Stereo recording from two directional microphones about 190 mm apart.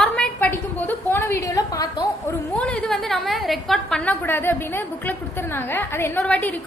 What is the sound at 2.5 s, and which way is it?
A woman's voice, 5° left (ahead or behind).